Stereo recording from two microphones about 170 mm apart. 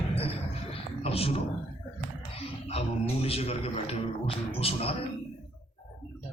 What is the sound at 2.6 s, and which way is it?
Speech, 35° left (ahead or behind).